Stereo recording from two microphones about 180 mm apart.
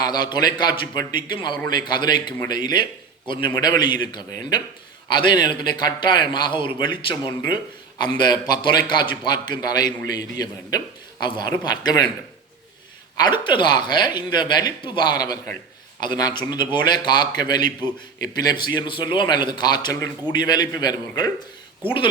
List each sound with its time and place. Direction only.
0.0 s a man's voice: 25° left (ahead or behind)
13.1 s a man's voice: 25° left (ahead or behind)